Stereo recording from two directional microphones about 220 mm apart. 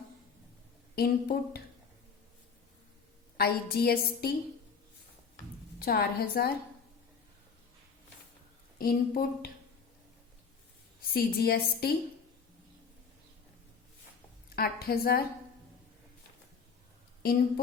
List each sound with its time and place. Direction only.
0.9 s a woman's voice: 40° left (ahead or behind)
3.3 s a woman's voice: 45° left (ahead or behind)
5.8 s a woman's voice: 45° left (ahead or behind)
8.8 s a woman's voice: 40° left (ahead or behind)
11.1 s a woman's voice: 45° left (ahead or behind)
14.5 s a woman's voice: 45° left (ahead or behind)